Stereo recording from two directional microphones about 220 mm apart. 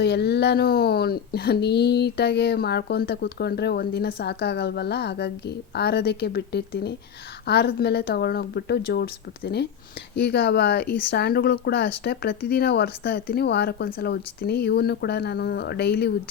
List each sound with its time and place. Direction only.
0.0 s speech: 50° left (ahead or behind)